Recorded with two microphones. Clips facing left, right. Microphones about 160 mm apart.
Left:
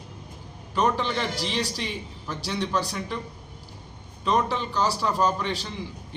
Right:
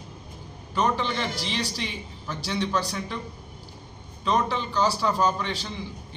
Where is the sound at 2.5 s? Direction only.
5° left (ahead or behind).